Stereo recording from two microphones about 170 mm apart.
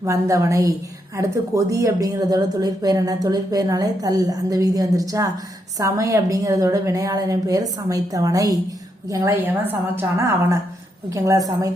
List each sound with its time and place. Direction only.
0.0 s a woman's voice: 20° right (ahead or behind)